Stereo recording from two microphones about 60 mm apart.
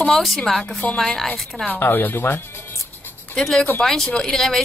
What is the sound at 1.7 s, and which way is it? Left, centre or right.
Speech, left.